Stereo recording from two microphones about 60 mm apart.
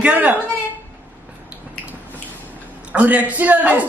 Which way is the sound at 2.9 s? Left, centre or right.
Right.